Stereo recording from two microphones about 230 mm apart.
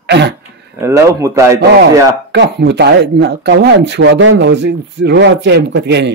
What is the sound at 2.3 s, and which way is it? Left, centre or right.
A man's voice, right.